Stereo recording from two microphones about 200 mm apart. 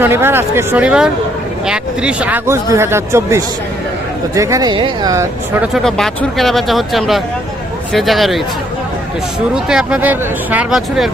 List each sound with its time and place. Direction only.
0.0 s speech: 10° right (ahead or behind)
5.7 s speech: centre (ahead or behind)
9.6 s speech: 5° right (ahead or behind)